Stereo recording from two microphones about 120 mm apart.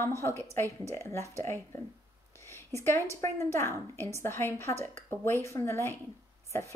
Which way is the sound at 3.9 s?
20° left (ahead or behind).